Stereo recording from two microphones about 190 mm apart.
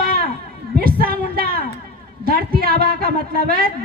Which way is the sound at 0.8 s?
50° right (ahead or behind).